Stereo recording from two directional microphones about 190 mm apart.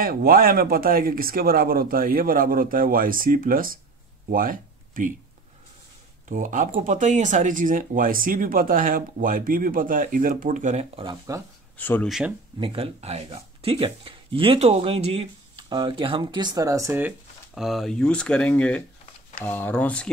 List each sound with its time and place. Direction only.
0.0 s speech: 50° right (ahead or behind)
6.2 s speech: 45° right (ahead or behind)
11.7 s speech: 10° left (ahead or behind)
12.5 s speech: 30° right (ahead or behind); by 17.1 s 15° right (ahead or behind)
17.6 s speech: centre (ahead or behind)